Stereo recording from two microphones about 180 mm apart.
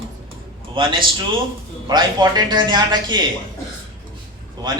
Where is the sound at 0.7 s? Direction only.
30° right (ahead or behind).